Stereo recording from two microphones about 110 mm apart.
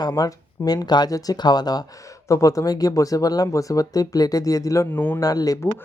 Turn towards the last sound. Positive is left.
turn(degrees=35)  # may be behind; listen again after turning